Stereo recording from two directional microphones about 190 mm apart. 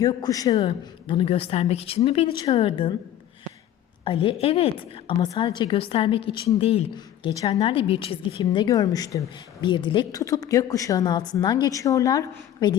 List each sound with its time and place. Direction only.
0.0 s a woman's voice: 20° left (ahead or behind)
4.0 s a woman's voice: 30° left (ahead or behind)